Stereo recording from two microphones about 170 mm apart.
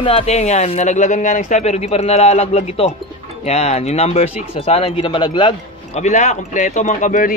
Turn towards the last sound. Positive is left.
turn(degrees=50)  # may be behind; listen again after turning